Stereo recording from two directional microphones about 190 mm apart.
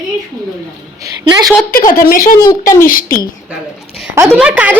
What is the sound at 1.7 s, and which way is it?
Speech, 50° left (ahead or behind).